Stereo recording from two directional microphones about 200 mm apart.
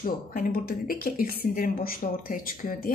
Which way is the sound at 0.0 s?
45° left (ahead or behind).